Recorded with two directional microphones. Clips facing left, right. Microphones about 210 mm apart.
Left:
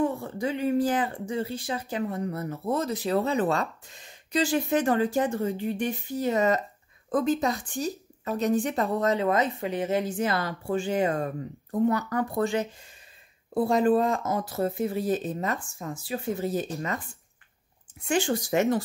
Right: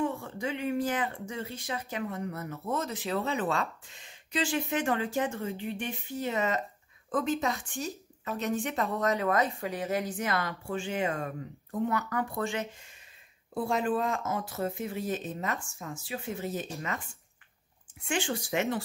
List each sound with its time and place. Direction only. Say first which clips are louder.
0.0 s speech: left 5 dB; 35° left (ahead or behind)
18.0 s speech: left 6 dB; 40° left (ahead or behind)